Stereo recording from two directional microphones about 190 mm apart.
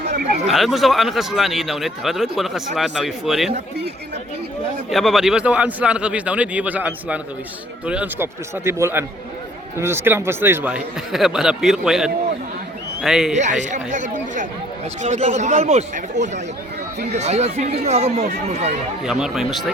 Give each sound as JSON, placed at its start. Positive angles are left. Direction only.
{"t": 0.4, "sound": "a man's voice", "side_deg": 0}
{"t": 4.9, "sound": "a man's voice", "side_deg": 0}
{"t": 13.3, "sound": "speech", "side_deg": -40}
{"t": 19.0, "sound": "a man's voice", "side_deg": 0}